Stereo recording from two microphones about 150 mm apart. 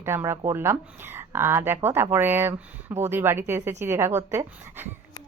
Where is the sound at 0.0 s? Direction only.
15° right (ahead or behind).